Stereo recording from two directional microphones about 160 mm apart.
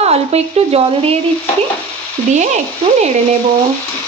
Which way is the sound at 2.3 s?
50° right (ahead or behind).